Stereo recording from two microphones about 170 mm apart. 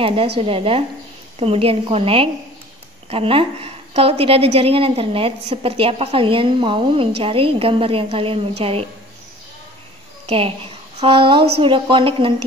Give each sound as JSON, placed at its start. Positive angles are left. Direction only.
{"t": 0.0, "sound": "a woman's voice", "side_deg": -30}
{"t": 10.2, "sound": "a woman's voice", "side_deg": -35}